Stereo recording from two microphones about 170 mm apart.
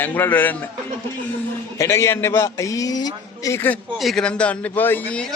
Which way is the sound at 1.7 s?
15° left (ahead or behind).